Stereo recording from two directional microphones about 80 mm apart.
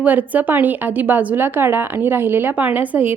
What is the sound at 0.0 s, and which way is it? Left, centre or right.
A woman's voice, right.